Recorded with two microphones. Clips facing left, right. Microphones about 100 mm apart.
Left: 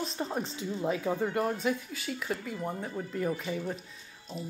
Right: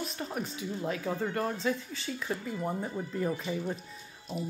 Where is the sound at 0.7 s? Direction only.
15° left (ahead or behind); by 3.7 s centre (ahead or behind).